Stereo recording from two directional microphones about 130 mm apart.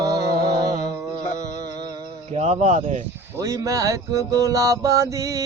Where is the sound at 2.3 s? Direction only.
55° right (ahead or behind).